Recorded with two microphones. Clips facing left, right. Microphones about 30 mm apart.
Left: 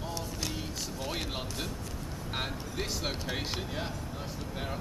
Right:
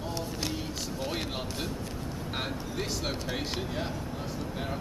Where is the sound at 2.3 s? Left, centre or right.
Centre.